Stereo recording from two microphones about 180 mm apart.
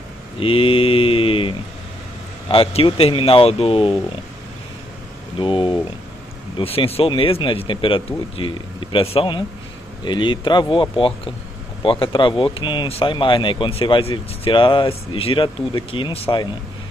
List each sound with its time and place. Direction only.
0.4 s speech: 30° left (ahead or behind)
5.4 s speech: 25° left (ahead or behind)